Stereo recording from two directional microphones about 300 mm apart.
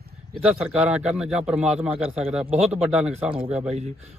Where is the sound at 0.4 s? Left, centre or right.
Centre.